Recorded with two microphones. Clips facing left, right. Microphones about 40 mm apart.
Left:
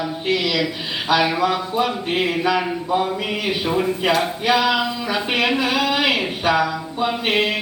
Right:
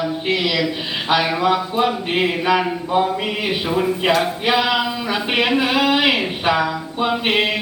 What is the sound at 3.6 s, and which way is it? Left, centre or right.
Speech, centre.